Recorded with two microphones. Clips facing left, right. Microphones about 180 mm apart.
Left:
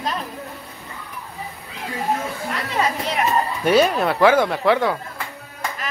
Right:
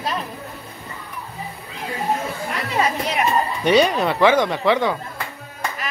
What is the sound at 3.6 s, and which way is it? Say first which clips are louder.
Speech: even; 5° left (ahead or behind).